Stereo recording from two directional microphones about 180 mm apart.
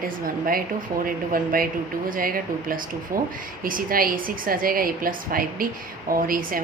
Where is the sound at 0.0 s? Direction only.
55° right (ahead or behind).